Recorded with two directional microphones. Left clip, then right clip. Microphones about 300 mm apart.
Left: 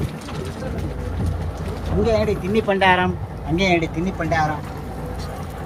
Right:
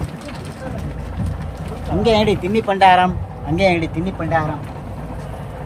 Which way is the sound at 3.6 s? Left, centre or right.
Centre.